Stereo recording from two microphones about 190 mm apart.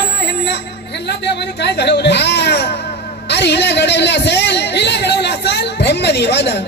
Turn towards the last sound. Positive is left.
turn(degrees=65)  # may be behind; listen again after turning